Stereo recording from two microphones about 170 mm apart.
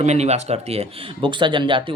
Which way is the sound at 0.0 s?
40° right (ahead or behind).